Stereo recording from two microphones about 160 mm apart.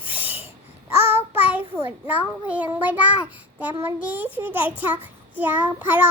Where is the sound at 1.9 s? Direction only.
10° right (ahead or behind).